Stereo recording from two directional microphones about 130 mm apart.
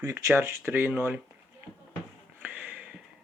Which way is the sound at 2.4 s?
10° right (ahead or behind).